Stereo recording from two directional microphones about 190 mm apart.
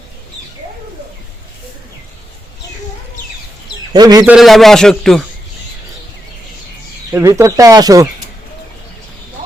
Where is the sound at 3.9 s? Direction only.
20° right (ahead or behind).